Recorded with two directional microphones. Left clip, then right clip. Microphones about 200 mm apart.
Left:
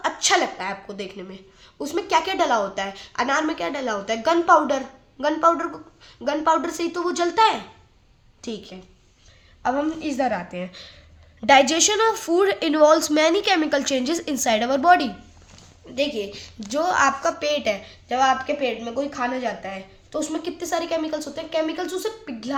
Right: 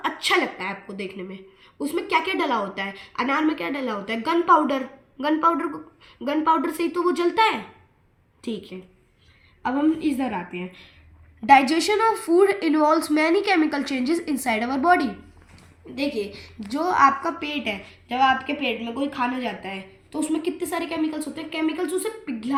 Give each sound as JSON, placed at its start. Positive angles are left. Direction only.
{"t": 0.0, "sound": "a woman's voice", "side_deg": 20}
{"t": 10.5, "sound": "a woman's voice", "side_deg": 40}
{"t": 11.4, "sound": "a woman's voice", "side_deg": 30}
{"t": 18.1, "sound": "a woman's voice", "side_deg": 15}